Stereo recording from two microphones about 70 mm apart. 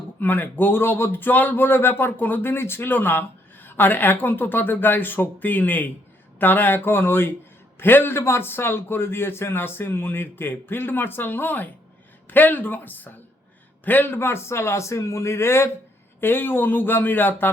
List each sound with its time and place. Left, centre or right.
0.2 s a man's voice: left